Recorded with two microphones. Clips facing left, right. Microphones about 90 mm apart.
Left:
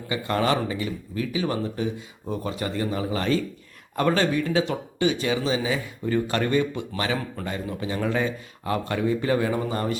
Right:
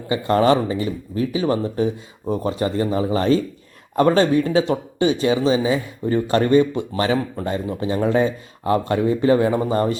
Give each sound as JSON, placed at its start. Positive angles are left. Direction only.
{"t": 0.1, "sound": "speech", "side_deg": -35}